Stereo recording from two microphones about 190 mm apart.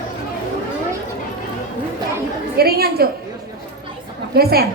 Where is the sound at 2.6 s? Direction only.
55° right (ahead or behind).